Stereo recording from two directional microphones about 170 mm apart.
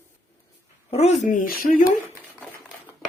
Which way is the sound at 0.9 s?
40° left (ahead or behind).